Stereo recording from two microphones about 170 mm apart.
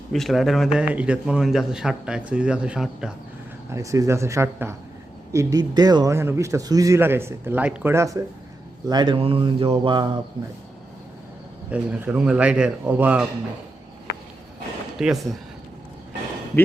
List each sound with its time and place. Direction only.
0.1 s speech: centre (ahead or behind)
3.7 s a man's voice: 20° right (ahead or behind)
11.7 s a man's voice: 5° right (ahead or behind)
14.9 s speech: centre (ahead or behind)